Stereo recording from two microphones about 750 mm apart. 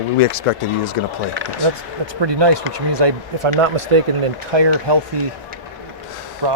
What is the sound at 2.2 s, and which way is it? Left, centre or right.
Speech, right.